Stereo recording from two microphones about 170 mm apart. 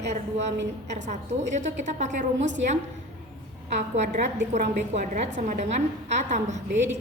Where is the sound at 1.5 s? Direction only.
45° right (ahead or behind).